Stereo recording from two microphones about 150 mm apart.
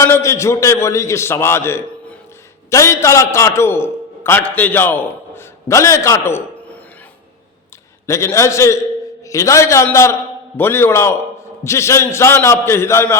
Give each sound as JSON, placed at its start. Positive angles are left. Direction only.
{"t": 0.0, "sound": "a man's voice", "side_deg": 20}
{"t": 8.0, "sound": "a man's voice", "side_deg": 20}